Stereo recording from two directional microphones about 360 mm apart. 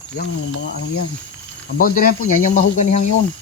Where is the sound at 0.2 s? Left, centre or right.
Left.